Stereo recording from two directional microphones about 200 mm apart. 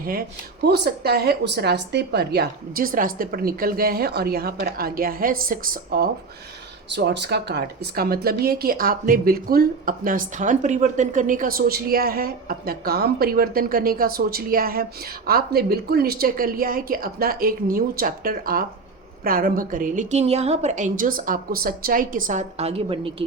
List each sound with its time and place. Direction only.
0.0 s speech: 45° right (ahead or behind)
6.9 s a woman's voice: 60° right (ahead or behind); by 23.2 s 25° right (ahead or behind)